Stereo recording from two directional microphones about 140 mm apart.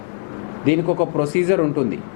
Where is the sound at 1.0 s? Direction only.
20° left (ahead or behind).